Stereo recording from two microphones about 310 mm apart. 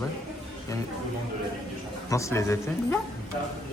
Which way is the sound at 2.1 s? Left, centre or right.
Centre.